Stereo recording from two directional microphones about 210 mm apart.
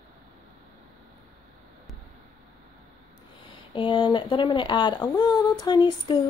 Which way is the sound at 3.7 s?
20° left (ahead or behind).